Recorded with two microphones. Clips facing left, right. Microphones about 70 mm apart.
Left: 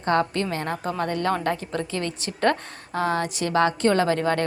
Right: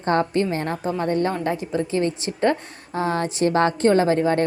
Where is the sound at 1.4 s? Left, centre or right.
Centre.